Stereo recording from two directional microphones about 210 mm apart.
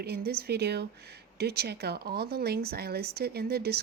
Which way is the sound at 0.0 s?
50° right (ahead or behind).